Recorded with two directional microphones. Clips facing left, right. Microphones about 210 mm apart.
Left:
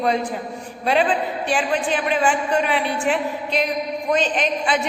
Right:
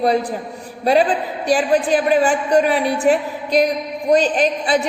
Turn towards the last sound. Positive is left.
turn(degrees=-35)  # may be behind; listen again after turning